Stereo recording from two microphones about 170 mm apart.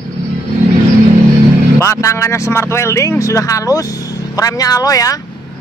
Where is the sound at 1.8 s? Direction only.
15° left (ahead or behind).